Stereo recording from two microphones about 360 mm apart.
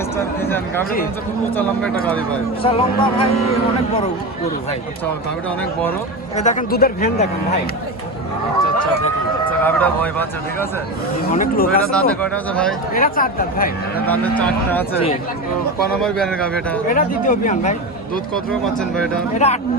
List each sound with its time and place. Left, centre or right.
0.4 s speech: centre
2.0 s speech: centre
2.6 s speech: centre
6.3 s a man's voice: centre
9.5 s speech: centre
11.3 s a man's voice: left
11.9 s speech: centre
12.9 s a man's voice: left
14.1 s speech: centre
16.0 s speech: centre
16.9 s a man's voice: left
18.6 s speech: centre
19.3 s speech: centre